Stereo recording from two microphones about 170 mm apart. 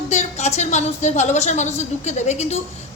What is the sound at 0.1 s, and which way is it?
A woman's voice, 40° left (ahead or behind).